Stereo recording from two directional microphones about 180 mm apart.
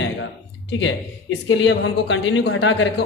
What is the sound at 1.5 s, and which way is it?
A woman's voice, 90° left.